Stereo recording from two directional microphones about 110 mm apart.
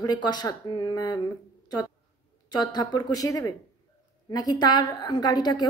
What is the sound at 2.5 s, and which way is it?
A woman's voice, 40° left (ahead or behind).